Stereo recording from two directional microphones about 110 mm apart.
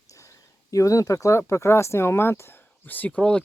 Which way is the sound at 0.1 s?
30° left (ahead or behind).